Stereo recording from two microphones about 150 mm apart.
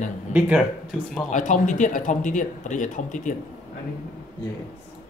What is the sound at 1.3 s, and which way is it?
Speech, 55° left (ahead or behind).